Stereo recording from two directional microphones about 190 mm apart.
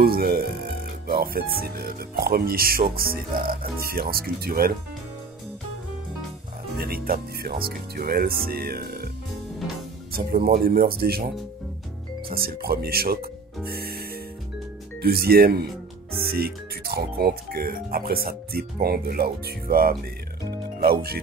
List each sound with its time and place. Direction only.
0.0 s music: 55° right (ahead or behind)
1.0 s speech: 50° right (ahead or behind)
6.8 s speech: 55° right (ahead or behind)
10.1 s speech: 50° right (ahead or behind)
12.4 s speech: 55° right (ahead or behind)
13.7 s music: 55° right (ahead or behind)
15.0 s speech: 55° right (ahead or behind)